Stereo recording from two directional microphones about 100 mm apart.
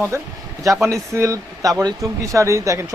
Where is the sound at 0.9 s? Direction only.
30° right (ahead or behind).